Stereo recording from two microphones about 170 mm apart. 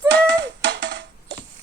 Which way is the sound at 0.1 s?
90° right.